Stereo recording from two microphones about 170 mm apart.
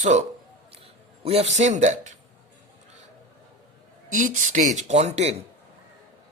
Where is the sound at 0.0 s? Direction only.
45° right (ahead or behind).